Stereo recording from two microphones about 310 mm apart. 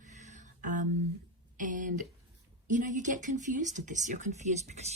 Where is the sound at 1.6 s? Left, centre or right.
Right.